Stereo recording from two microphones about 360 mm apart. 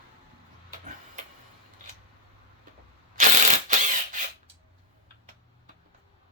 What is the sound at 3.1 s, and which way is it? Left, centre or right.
Ratchet, right.